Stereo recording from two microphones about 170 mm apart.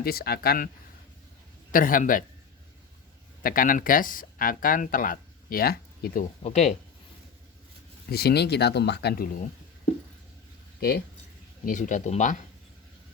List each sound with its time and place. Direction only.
0.0 s speech: 65° left (ahead or behind)
1.7 s speech: 55° left (ahead or behind)
3.4 s speech: 55° left (ahead or behind)
6.4 s speech: 40° left (ahead or behind)
8.1 s speech: 70° left (ahead or behind)
10.8 s speech: 65° left (ahead or behind)
11.6 s speech: 50° left (ahead or behind)